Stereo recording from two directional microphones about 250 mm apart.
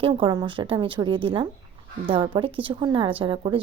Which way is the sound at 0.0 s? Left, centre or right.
Centre.